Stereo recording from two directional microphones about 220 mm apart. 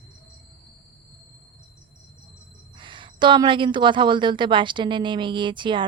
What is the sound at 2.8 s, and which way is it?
A woman's voice, 20° right (ahead or behind).